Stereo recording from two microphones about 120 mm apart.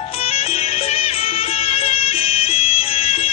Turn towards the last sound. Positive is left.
turn(degrees=50)  # may be behind; listen again after turning